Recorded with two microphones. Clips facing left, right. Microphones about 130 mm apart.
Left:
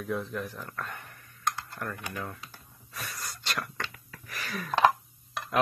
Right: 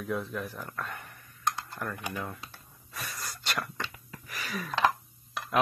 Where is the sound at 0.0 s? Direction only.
Centre (ahead or behind).